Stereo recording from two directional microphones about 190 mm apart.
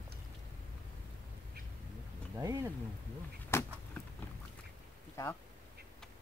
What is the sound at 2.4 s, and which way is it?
Speech, 15° right (ahead or behind).